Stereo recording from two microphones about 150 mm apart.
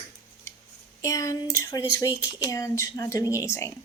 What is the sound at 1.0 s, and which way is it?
Speech, 20° left (ahead or behind).